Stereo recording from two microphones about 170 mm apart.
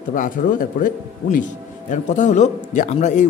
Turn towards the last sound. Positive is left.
turn(degrees=40)  # may be behind; listen again after turning